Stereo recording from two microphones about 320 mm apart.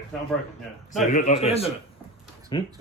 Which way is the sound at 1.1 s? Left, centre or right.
Left.